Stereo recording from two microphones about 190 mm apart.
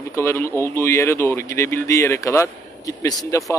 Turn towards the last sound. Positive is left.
turn(degrees=20)  # may be behind; listen again after turning